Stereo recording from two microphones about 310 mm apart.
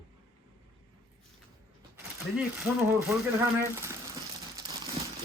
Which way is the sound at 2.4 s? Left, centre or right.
Centre.